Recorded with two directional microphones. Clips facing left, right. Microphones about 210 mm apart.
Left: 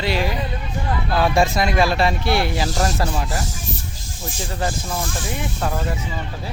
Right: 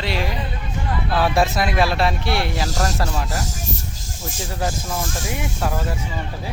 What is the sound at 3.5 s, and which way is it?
Music, 45° right (ahead or behind).